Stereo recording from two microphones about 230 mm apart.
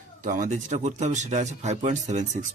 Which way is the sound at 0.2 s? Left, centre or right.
Right.